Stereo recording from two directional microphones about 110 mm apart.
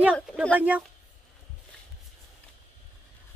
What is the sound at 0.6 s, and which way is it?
Speech, 15° right (ahead or behind).